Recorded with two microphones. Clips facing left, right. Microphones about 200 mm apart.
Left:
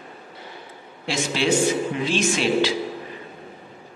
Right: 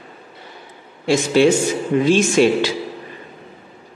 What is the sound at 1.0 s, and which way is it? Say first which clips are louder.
A man's voice: right 10 dB; 45° right (ahead or behind).